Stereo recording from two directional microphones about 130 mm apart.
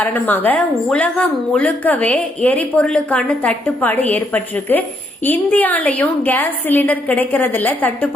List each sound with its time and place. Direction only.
0.0 s a woman's voice: 15° left (ahead or behind)